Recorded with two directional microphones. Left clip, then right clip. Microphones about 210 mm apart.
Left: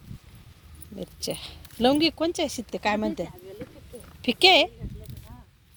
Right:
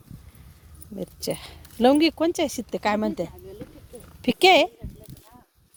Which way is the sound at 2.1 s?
35° right (ahead or behind).